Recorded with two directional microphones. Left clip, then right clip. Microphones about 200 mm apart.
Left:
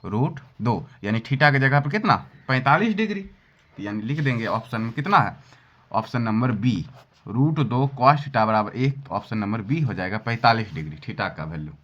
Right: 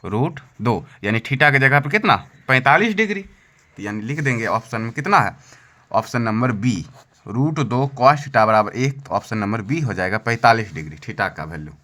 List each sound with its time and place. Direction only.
0.0 s speech: 25° right (ahead or behind); by 11.6 s 40° right (ahead or behind)